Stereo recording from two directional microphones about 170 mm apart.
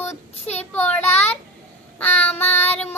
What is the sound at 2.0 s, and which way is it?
Child singing, 10° left (ahead or behind).